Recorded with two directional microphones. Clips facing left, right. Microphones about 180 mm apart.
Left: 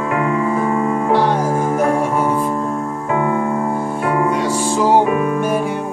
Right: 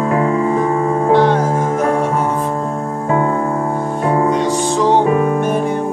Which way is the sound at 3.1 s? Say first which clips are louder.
Right 2 dB; 35° right (ahead or behind).